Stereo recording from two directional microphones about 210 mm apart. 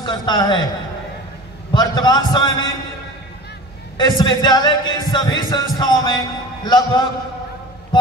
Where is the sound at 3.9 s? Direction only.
20° left (ahead or behind).